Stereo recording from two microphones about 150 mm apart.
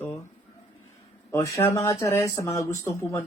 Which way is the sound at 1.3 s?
20° left (ahead or behind).